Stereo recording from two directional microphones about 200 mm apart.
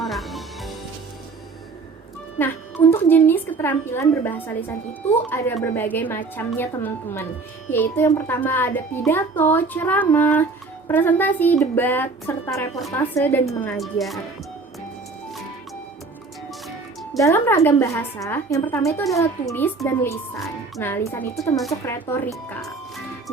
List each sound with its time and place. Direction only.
0.0 s music: centre (ahead or behind)
2.4 s speech: 10° left (ahead or behind)
13.7 s speech: centre (ahead or behind)
17.2 s speech: 15° left (ahead or behind)